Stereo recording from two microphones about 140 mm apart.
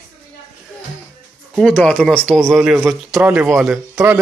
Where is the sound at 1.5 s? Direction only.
5° left (ahead or behind).